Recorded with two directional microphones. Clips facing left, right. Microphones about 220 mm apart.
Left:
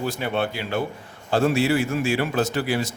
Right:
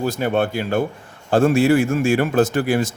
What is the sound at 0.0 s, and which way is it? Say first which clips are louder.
Speech: right 5 dB; 45° right (ahead or behind).